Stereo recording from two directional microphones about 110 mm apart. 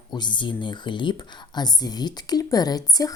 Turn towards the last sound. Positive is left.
turn(degrees=35)  # may be behind; listen again after turning